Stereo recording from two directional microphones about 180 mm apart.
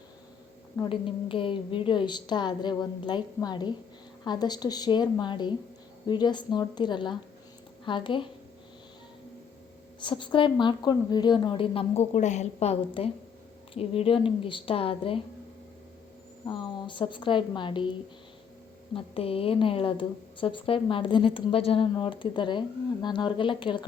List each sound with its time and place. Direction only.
0.8 s a woman's voice: 30° left (ahead or behind)
10.0 s a woman's voice: 25° left (ahead or behind)
16.5 s a woman's voice: 25° left (ahead or behind)
18.9 s a woman's voice: 30° left (ahead or behind)